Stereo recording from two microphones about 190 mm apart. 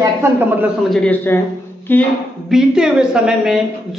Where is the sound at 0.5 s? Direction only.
5° right (ahead or behind).